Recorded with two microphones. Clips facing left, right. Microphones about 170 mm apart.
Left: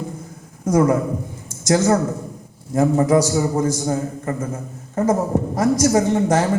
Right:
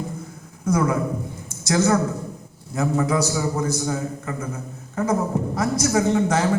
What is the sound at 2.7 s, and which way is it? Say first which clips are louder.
Speech: left 6 dB; 45° left (ahead or behind).